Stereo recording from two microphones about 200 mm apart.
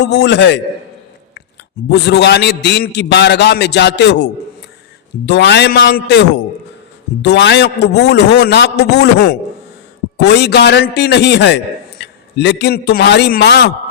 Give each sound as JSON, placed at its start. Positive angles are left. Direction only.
{"t": 0.0, "sound": "a man's voice", "side_deg": 60}
{"t": 1.9, "sound": "a man's voice", "side_deg": 60}